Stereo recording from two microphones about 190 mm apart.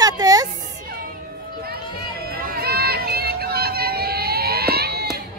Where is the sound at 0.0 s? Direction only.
20° right (ahead or behind).